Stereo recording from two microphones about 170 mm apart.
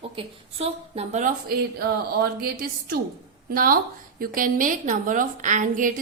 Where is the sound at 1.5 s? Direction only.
65° right (ahead or behind).